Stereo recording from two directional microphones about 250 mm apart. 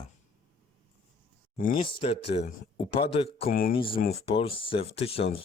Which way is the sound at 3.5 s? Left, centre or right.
Left.